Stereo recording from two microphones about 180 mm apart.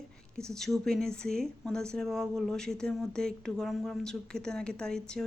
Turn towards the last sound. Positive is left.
turn(degrees=5)  # may be behind; listen again after turning